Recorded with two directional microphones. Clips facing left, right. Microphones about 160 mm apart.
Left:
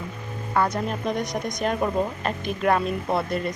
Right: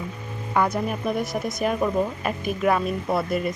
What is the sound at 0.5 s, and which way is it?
Speech, 10° right (ahead or behind).